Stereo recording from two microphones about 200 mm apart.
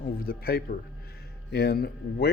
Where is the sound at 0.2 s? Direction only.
50° left (ahead or behind).